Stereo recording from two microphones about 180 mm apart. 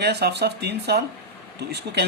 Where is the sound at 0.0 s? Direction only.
65° right (ahead or behind).